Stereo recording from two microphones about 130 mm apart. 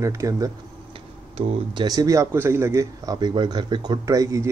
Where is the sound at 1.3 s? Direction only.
40° right (ahead or behind).